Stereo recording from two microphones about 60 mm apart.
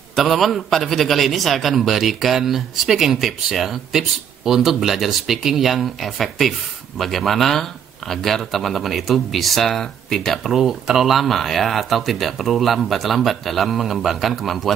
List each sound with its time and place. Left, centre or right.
0.1 s speech: centre